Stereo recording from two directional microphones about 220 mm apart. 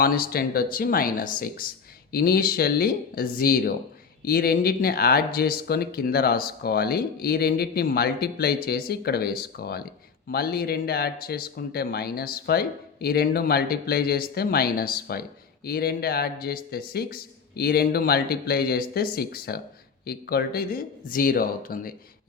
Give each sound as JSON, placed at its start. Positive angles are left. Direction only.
{"t": 0.0, "sound": "speech", "side_deg": 45}